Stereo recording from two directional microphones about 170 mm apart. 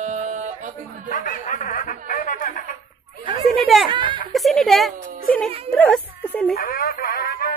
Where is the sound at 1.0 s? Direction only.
50° left (ahead or behind).